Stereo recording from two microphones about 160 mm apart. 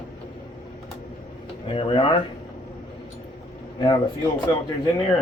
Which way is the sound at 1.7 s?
35° left (ahead or behind).